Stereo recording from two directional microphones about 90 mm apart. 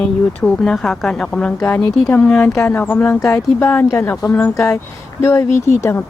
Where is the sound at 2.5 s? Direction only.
35° left (ahead or behind).